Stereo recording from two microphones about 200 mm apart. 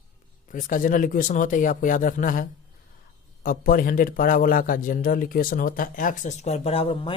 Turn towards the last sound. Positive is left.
turn(degrees=30)  # may be behind; listen again after turning